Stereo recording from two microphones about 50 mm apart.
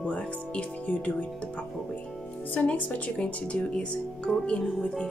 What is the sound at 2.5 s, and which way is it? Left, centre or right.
Speech, left.